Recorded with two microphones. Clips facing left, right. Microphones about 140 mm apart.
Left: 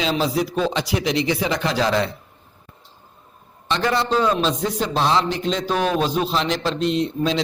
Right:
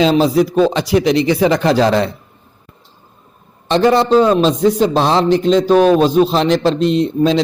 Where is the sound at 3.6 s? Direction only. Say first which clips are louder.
Right 9 dB; 30° right (ahead or behind).